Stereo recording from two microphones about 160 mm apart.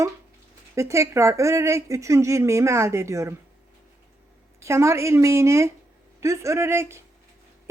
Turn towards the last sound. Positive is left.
turn(degrees=-15)  # may be behind; listen again after turning